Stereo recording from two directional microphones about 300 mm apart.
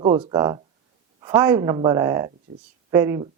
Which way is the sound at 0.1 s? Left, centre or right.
Centre.